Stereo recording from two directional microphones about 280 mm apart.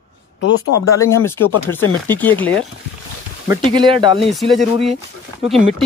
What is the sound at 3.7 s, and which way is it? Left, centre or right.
Speech, centre.